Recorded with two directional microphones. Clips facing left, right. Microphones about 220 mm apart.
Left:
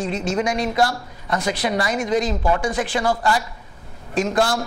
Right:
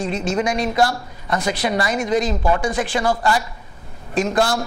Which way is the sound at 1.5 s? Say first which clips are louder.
Right 1 dB; 10° right (ahead or behind).